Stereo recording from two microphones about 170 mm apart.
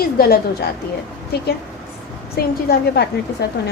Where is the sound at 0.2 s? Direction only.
65° left (ahead or behind).